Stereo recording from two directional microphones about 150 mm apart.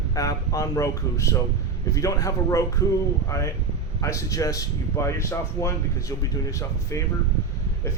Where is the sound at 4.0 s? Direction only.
20° left (ahead or behind).